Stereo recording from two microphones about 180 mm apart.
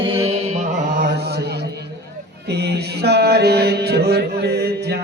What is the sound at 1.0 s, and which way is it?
Mantra, 65° right (ahead or behind).